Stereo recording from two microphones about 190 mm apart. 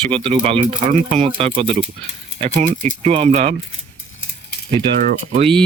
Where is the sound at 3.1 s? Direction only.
35° right (ahead or behind).